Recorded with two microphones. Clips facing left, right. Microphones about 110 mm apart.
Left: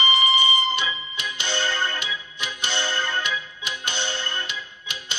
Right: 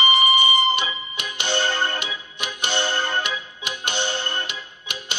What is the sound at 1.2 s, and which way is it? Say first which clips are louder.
Music: right 5 dB; 50° right (ahead or behind).